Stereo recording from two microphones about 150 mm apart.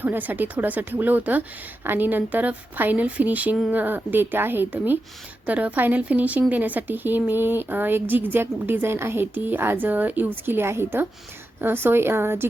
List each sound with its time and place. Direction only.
0.0 s speech: 10° right (ahead or behind)